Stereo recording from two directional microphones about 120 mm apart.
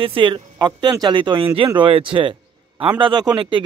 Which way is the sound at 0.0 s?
45° right (ahead or behind).